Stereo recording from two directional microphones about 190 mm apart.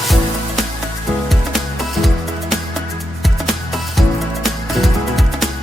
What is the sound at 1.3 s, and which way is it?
Music, centre (ahead or behind).